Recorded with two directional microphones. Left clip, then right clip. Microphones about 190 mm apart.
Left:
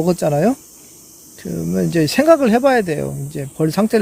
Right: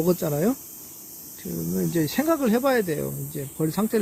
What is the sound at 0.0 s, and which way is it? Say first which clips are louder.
Speech: left 8 dB; 45° left (ahead or behind).